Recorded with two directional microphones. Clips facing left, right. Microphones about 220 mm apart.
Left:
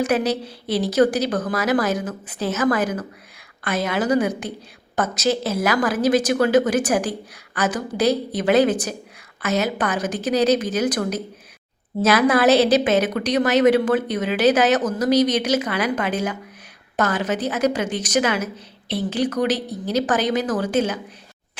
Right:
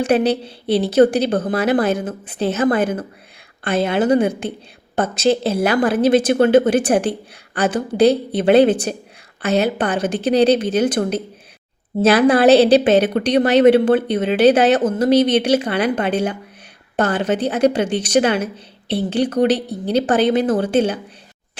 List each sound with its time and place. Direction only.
0.0 s a woman's voice: 30° right (ahead or behind)